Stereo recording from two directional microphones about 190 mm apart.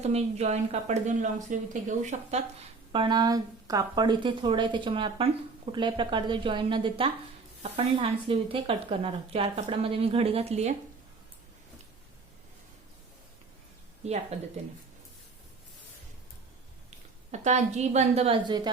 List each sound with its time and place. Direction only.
0.0 s speech: 35° right (ahead or behind)
2.9 s speech: 25° right (ahead or behind)
14.0 s speech: 35° right (ahead or behind)
17.3 s speech: 35° right (ahead or behind)